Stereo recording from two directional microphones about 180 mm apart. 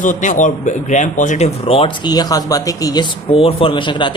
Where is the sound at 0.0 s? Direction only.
45° left (ahead or behind).